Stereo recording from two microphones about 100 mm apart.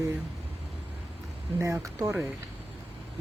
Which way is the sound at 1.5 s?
30° right (ahead or behind).